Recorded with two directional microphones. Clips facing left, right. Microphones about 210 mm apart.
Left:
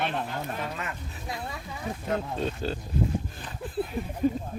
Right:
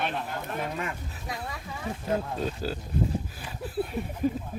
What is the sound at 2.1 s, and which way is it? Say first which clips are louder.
Speech: even; 5° right (ahead or behind).